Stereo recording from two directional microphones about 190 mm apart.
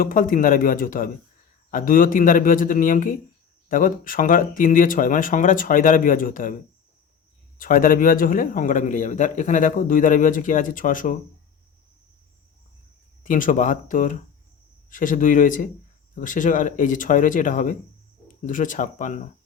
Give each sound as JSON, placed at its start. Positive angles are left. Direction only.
{"t": 0.0, "sound": "a man's voice", "side_deg": 45}
{"t": 7.6, "sound": "a man's voice", "side_deg": 45}
{"t": 13.2, "sound": "a man's voice", "side_deg": 45}